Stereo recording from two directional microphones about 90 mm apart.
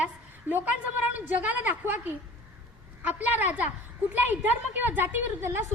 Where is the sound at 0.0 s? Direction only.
20° right (ahead or behind).